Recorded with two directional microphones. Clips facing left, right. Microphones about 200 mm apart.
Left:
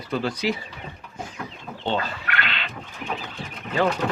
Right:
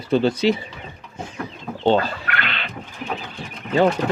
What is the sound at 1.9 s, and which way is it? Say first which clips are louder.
Speech: right 8 dB; 35° right (ahead or behind).